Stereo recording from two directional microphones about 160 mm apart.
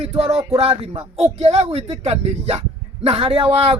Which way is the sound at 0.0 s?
40° right (ahead or behind).